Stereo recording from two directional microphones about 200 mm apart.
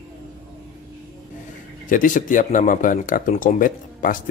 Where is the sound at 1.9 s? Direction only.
40° left (ahead or behind).